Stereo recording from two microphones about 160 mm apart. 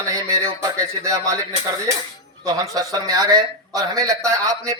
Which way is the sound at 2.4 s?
20° right (ahead or behind).